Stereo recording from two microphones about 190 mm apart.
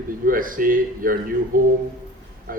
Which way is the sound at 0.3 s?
45° right (ahead or behind).